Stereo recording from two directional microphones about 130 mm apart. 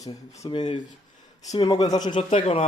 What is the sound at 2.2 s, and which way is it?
Speech, 50° left (ahead or behind).